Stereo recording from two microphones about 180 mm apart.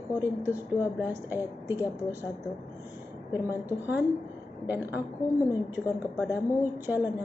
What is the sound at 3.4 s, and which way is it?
Speech, 10° right (ahead or behind).